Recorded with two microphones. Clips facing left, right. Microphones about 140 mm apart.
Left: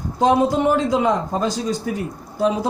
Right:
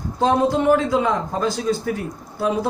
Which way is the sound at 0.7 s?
20° left (ahead or behind).